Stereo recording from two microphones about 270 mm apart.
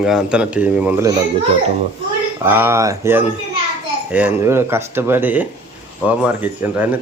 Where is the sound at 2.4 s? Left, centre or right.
Centre.